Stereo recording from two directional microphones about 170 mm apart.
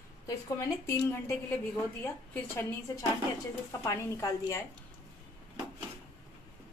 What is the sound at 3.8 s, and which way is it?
Speech, 20° left (ahead or behind).